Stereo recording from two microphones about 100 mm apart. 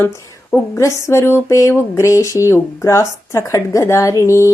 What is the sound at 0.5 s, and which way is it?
Speech, 25° left (ahead or behind).